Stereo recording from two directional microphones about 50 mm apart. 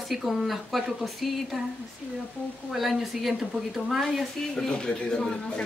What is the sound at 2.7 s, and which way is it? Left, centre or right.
Speech, centre.